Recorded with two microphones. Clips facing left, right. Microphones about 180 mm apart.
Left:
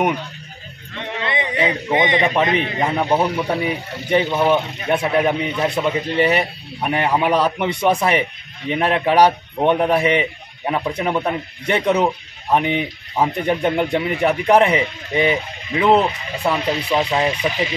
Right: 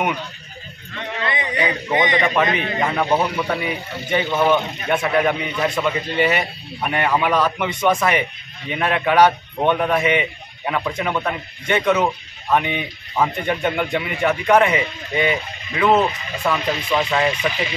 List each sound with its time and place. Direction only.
1.2 s a man's voice: 25° left (ahead or behind)
3.6 s a man's voice: 35° left (ahead or behind)